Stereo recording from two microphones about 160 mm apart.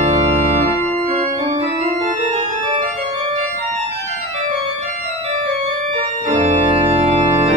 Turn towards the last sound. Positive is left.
turn(degrees=-40)  # may be behind; listen again after turning